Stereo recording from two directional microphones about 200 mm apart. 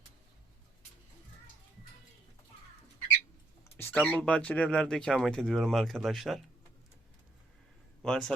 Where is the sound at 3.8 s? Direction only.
10° left (ahead or behind).